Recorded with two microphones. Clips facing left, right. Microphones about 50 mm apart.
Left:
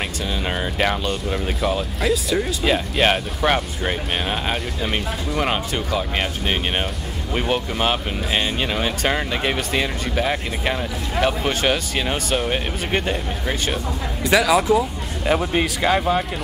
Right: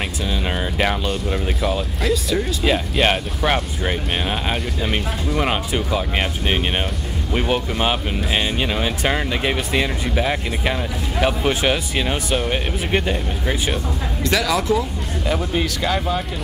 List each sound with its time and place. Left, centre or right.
0.5 s speech: centre
14.2 s speech: centre